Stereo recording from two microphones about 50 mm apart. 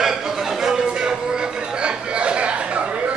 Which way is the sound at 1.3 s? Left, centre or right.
Centre.